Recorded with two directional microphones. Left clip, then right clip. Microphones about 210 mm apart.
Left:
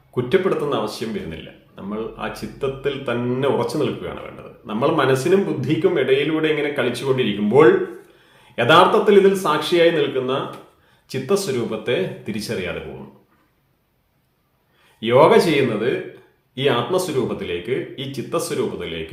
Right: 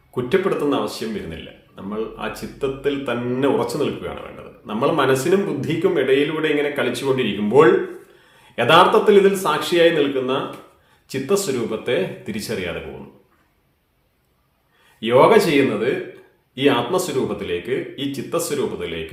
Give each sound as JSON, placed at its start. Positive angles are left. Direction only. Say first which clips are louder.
{"t": 0.1, "sound": "speech", "louder": "left 1 dB", "side_deg": 5}
{"t": 15.0, "sound": "speech", "louder": "even", "side_deg": 5}